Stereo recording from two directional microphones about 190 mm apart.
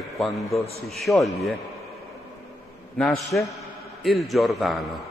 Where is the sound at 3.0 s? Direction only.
Centre (ahead or behind).